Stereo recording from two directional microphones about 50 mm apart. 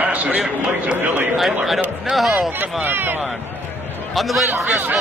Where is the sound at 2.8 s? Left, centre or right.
Right.